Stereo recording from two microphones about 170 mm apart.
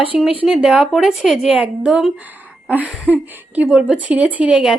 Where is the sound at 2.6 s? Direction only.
10° right (ahead or behind).